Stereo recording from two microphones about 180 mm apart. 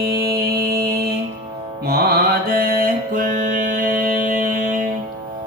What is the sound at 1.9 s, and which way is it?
Mantra, 55° right (ahead or behind).